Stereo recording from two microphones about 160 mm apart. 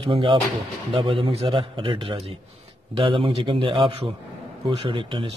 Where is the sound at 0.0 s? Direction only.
35° right (ahead or behind).